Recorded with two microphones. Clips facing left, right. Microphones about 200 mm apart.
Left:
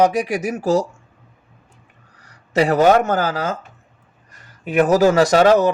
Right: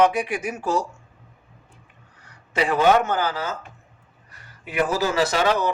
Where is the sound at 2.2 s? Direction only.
40° left (ahead or behind).